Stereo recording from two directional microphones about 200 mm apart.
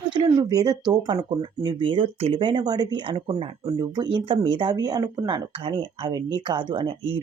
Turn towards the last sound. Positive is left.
turn(degrees=-25)  # may be behind; listen again after turning